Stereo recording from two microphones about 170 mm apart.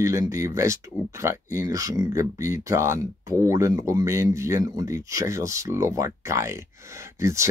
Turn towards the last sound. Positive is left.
turn(degrees=-15)  # may be behind; listen again after turning